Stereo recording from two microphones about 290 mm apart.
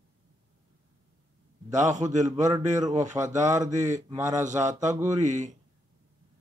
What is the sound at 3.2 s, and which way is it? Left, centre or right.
Speech, centre.